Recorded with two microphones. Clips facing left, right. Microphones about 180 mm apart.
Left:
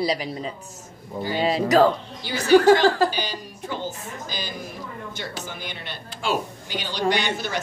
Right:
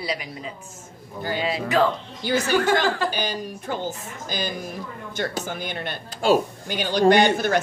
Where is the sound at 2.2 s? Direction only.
50° right (ahead or behind).